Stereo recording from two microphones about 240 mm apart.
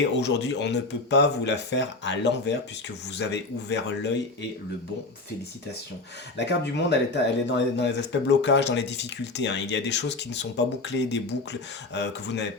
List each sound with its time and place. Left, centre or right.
0.1 s speech: left
6.3 s speech: left